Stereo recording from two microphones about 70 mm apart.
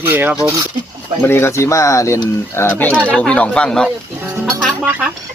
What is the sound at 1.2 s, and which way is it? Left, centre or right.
Speech, left.